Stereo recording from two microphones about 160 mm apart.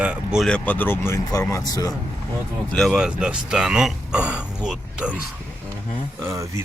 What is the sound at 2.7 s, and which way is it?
Speech, centre (ahead or behind).